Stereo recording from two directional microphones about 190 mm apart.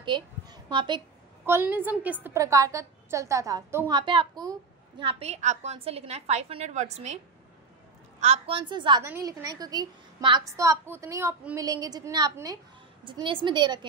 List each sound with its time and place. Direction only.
0.0 s a woman's voice: 25° right (ahead or behind)
1.4 s a woman's voice: 10° right (ahead or behind)
4.0 s a woman's voice: 25° right (ahead or behind)
8.2 s a woman's voice: 30° right (ahead or behind)